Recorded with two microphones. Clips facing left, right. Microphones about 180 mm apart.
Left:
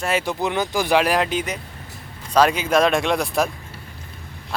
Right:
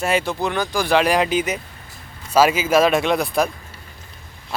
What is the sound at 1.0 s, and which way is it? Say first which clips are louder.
Speech: right 2 dB; centre (ahead or behind).